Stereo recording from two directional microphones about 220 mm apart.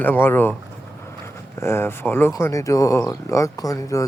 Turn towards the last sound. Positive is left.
turn(degrees=15)  # may be behind; listen again after turning